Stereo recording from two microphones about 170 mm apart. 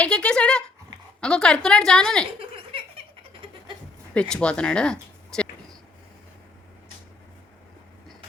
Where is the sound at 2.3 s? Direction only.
35° right (ahead or behind).